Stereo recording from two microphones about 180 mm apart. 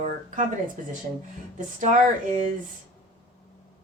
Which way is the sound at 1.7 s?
40° right (ahead or behind).